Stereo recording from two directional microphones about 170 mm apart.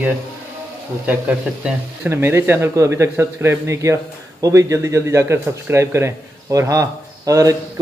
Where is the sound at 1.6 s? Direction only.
10° right (ahead or behind).